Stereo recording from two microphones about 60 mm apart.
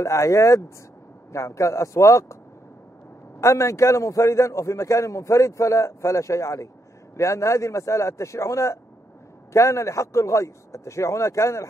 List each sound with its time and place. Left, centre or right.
0.0 s a man's voice: left
3.3 s a man's voice: left